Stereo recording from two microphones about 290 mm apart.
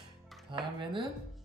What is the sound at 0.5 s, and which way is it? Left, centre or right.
Speech, centre.